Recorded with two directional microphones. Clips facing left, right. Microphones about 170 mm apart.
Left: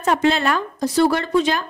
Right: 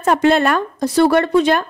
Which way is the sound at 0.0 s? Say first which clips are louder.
Right 4 dB; 55° right (ahead or behind).